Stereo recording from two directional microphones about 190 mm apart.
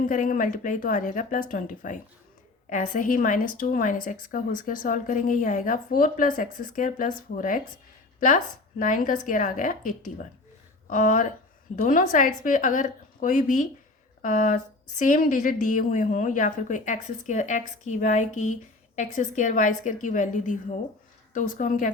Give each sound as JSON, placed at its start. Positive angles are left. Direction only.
{"t": 0.0, "sound": "a woman's voice", "side_deg": 45}
{"t": 8.8, "sound": "a woman's voice", "side_deg": 45}